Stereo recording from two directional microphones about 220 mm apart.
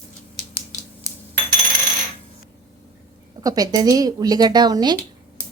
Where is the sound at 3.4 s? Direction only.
15° right (ahead or behind).